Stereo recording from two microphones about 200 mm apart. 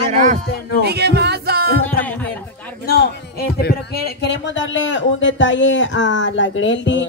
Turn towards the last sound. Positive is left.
turn(degrees=65)  # may be behind; listen again after turning